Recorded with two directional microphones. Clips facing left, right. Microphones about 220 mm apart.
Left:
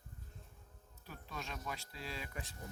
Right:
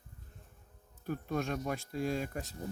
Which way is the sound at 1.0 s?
50° right (ahead or behind).